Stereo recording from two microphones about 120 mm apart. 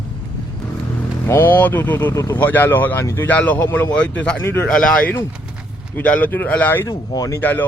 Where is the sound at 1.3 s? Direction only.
20° left (ahead or behind).